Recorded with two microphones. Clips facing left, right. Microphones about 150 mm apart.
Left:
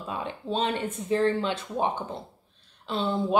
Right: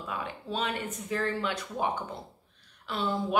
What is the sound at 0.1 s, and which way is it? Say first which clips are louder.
A woman's voice: left 5 dB; 25° left (ahead or behind).